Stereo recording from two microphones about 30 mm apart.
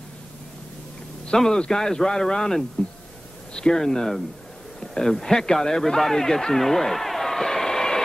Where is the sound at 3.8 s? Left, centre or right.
Centre.